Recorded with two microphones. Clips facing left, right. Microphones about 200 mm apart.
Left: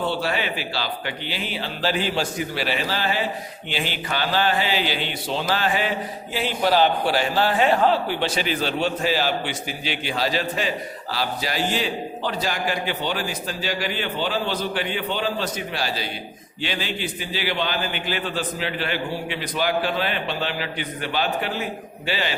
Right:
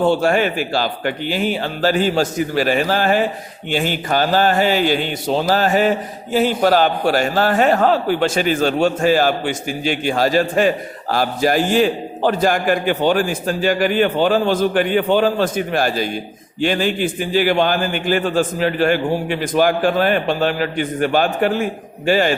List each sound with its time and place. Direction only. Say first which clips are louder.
0.0 s a man's voice: right 9 dB; 45° right (ahead or behind)